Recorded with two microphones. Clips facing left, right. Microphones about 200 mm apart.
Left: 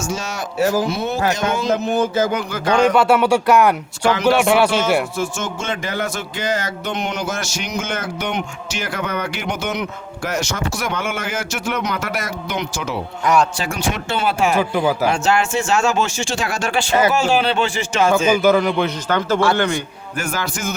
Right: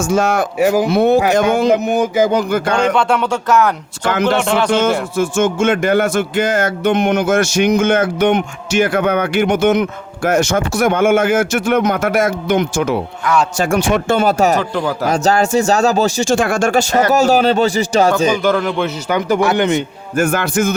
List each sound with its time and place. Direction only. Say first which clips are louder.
0.0 s a man's voice: right 10 dB; 55° right (ahead or behind)
0.6 s speech: right 3 dB; 15° right (ahead or behind)
0.9 s a man's voice: right 8 dB; 60° right (ahead or behind)
1.7 s speech: right 4 dB; 15° right (ahead or behind)
2.5 s a man's voice: right 4 dB; 55° right (ahead or behind)
2.9 s speech: left 1 dB; 5° left (ahead or behind)
5.7 s speech: right 10 dB; 55° right (ahead or behind)
14.6 s speech: left 1 dB; 10° left (ahead or behind)
15.0 s speech: right 3 dB; 40° right (ahead or behind)
18.4 s a man's voice: even; centre (ahead or behind)
19.0 s speech: right 4 dB; 15° right (ahead or behind)
20.1 s a man's voice: right 10 dB; 55° right (ahead or behind)